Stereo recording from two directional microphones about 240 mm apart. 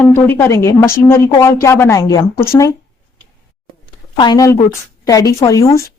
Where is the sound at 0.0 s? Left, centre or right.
Centre.